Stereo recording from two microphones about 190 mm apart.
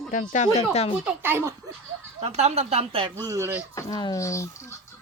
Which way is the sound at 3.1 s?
15° right (ahead or behind).